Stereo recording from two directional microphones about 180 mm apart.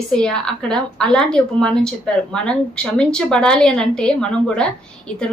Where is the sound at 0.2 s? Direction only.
5° left (ahead or behind).